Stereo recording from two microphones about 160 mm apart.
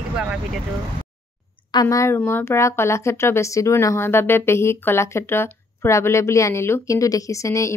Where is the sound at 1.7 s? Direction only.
20° left (ahead or behind).